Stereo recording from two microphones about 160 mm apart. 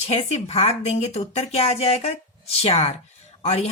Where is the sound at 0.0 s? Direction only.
45° left (ahead or behind).